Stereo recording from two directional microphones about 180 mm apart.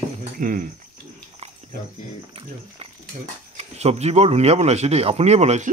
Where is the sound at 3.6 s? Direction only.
35° right (ahead or behind).